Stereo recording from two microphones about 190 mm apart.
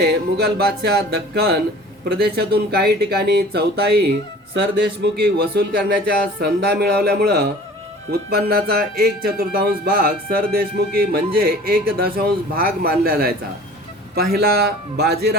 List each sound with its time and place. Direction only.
0.0 s speech: 55° right (ahead or behind)